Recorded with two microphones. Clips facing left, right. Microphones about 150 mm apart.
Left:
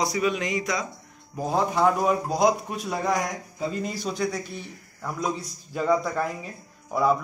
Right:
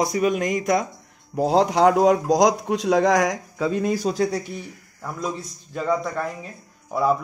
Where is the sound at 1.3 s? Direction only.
75° right (ahead or behind).